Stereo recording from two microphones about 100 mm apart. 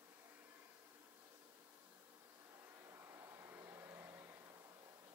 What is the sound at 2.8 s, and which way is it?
Vehicle, 30° right (ahead or behind).